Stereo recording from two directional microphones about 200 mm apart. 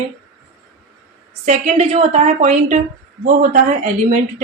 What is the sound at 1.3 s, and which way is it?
A woman's voice, 35° right (ahead or behind).